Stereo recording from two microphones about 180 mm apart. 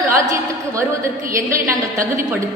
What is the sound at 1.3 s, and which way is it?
A woman's voice, 15° right (ahead or behind).